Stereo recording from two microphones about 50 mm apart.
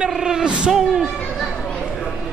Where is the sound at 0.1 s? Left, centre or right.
Centre.